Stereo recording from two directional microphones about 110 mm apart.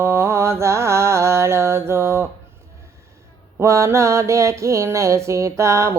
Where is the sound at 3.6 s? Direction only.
25° right (ahead or behind).